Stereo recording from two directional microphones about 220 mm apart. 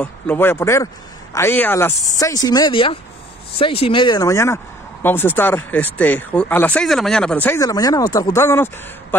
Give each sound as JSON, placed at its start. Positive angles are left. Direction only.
{"t": 0.0, "sound": "speech", "side_deg": 10}